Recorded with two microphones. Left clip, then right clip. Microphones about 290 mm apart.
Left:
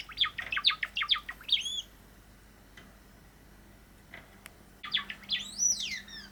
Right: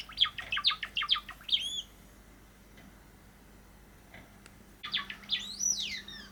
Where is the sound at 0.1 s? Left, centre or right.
Centre.